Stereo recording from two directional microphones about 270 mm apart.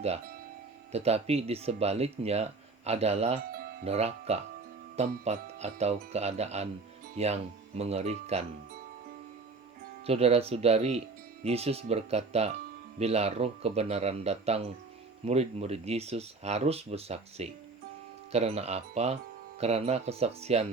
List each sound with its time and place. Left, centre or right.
0.9 s speech: right
10.1 s speech: right